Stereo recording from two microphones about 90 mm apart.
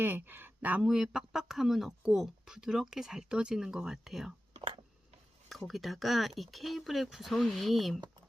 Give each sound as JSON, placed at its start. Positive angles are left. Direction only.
{"t": 0.0, "sound": "speech", "side_deg": -25}
{"t": 0.9, "sound": "speech", "side_deg": -5}
{"t": 5.5, "sound": "speech", "side_deg": 0}